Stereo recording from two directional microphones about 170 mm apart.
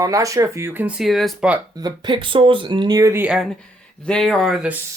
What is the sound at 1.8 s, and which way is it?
Speech, 25° right (ahead or behind).